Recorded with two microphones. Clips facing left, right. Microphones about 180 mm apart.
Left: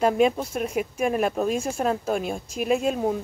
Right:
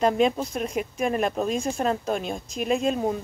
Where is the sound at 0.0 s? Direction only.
5° left (ahead or behind).